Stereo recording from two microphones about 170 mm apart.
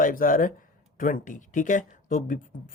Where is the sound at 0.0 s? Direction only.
55° left (ahead or behind).